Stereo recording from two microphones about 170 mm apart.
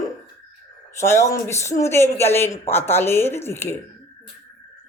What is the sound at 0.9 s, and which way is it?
Speech, 15° left (ahead or behind).